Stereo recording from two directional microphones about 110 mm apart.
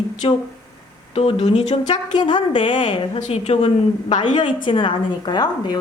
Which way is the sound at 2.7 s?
90° left.